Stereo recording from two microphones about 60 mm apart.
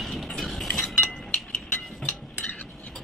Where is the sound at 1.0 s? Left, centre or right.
Centre.